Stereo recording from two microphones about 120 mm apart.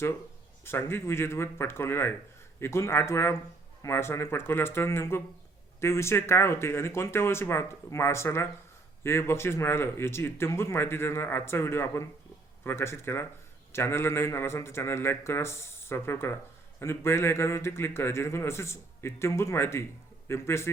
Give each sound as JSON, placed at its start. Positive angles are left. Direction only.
{"t": 0.6, "sound": "a man's voice", "side_deg": 20}